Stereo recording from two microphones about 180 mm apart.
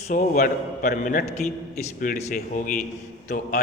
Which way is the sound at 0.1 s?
50° left (ahead or behind).